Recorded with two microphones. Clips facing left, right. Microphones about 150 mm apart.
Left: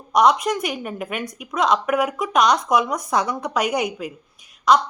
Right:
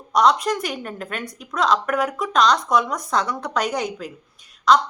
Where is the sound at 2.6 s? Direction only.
5° left (ahead or behind).